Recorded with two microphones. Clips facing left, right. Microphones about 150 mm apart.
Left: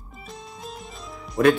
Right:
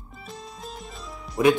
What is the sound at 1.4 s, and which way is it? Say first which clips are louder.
Speech: left 1 dB; 10° right (ahead or behind).